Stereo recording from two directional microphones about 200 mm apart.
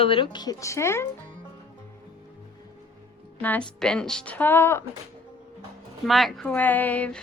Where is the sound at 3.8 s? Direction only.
5° left (ahead or behind).